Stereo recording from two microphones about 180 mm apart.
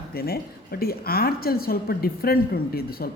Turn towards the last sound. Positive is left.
turn(degrees=55)  # may be behind; listen again after turning